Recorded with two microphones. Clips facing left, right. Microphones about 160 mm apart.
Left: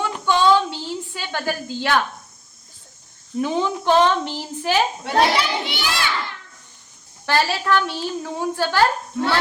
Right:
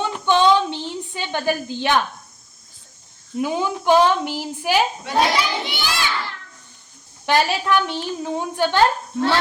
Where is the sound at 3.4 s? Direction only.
10° right (ahead or behind).